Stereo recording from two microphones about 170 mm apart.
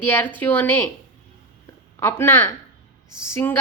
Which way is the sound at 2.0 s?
15° left (ahead or behind).